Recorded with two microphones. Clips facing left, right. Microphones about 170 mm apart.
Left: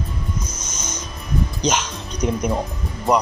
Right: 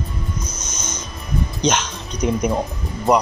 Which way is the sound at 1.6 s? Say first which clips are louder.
Right 5 dB; centre (ahead or behind).